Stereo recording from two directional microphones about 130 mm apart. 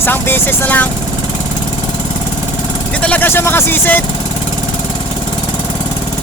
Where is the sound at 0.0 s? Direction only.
15° left (ahead or behind).